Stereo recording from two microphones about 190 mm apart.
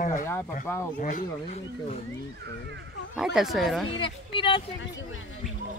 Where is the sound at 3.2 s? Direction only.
Centre (ahead or behind).